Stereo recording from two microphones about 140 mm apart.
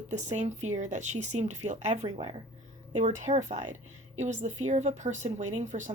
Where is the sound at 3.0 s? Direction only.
60° right (ahead or behind).